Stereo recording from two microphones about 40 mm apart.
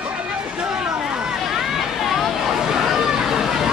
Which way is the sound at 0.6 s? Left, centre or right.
Right.